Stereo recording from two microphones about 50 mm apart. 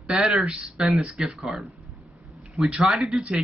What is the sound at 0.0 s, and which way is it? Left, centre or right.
A man's voice, centre.